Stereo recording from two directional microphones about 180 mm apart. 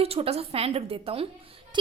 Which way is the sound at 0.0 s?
35° right (ahead or behind).